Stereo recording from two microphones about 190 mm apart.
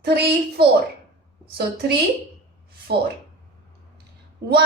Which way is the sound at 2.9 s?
60° right (ahead or behind).